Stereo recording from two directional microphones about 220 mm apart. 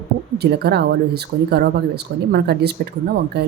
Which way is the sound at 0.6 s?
50° right (ahead or behind).